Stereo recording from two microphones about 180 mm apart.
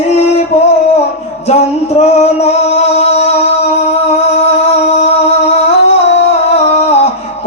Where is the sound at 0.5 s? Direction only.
40° left (ahead or behind).